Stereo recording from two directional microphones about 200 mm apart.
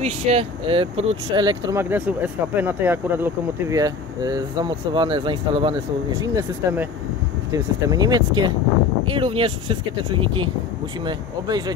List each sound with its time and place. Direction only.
0.0 s speech: 30° right (ahead or behind)
6.2 s speech: 15° right (ahead or behind)